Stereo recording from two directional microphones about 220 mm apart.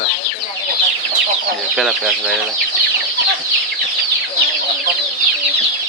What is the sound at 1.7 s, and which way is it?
Speech, centre (ahead or behind).